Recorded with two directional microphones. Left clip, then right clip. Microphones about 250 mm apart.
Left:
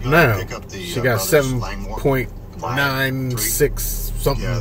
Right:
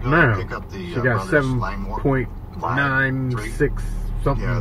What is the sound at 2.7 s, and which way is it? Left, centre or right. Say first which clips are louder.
Speech: even; centre.